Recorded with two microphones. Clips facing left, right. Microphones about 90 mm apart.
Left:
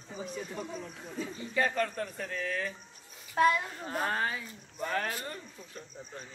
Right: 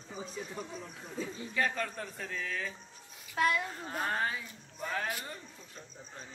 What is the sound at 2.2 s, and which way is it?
Speech, 5° left (ahead or behind).